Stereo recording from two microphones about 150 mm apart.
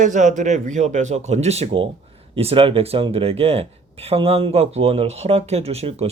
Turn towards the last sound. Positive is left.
turn(degrees=-45)  # may be behind; listen again after turning